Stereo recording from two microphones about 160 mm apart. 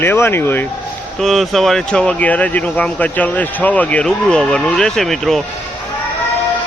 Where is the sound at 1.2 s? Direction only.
Centre (ahead or behind).